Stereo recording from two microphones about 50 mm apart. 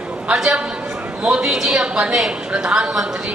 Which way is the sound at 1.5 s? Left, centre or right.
Centre.